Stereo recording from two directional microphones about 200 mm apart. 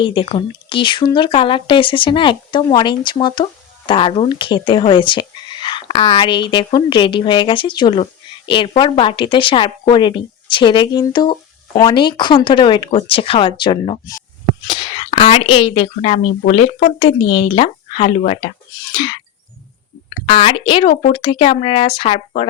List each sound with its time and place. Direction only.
0.0 s speech: 25° left (ahead or behind)
20.2 s speech: 30° left (ahead or behind)